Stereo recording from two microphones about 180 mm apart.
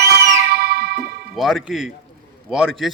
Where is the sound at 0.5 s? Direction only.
60° right (ahead or behind).